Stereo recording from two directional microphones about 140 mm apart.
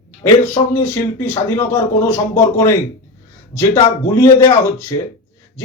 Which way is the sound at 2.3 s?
20° left (ahead or behind).